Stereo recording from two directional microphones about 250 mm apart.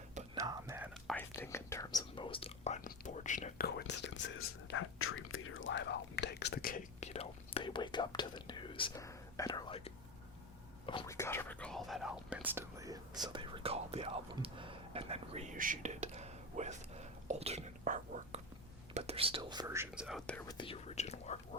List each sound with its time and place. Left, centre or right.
0.3 s whispering: centre
1.0 s whispering: centre
20.5 s whispering: left